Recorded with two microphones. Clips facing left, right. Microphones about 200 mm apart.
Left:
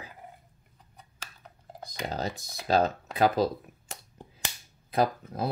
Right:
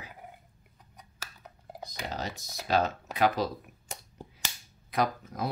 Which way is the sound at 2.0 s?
35° left (ahead or behind).